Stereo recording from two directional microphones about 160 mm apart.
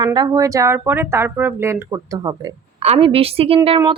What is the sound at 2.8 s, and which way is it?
Speech, 35° right (ahead or behind).